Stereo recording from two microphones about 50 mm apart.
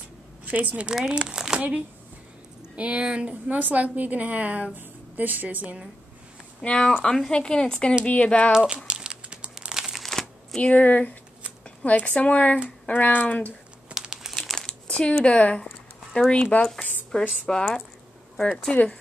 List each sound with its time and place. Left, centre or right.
0.5 s a woman's voice: right
0.8 s speech: centre
2.7 s a woman's voice: right
6.6 s speech: centre
8.5 s crumpling: centre
9.9 s crumpling: centre
10.6 s speech: left
13.9 s crumpling: centre
14.3 s crumpling: centre
14.7 s crumpling: centre
15.2 s a sound: left
16.5 s speech: left
17.1 s speech: centre
18.7 s speech: left